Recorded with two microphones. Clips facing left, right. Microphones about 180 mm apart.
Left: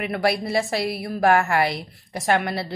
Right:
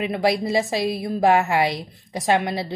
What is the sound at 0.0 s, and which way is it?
A woman's voice, 20° right (ahead or behind).